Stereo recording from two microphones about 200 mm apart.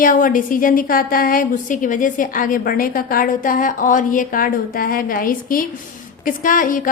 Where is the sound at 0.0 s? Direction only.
45° left (ahead or behind).